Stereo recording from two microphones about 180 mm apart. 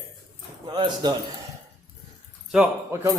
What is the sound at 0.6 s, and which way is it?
Speech, 25° right (ahead or behind).